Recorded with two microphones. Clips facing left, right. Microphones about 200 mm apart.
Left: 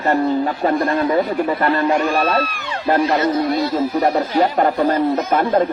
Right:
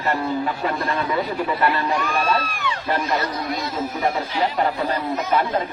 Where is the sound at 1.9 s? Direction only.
40° left (ahead or behind).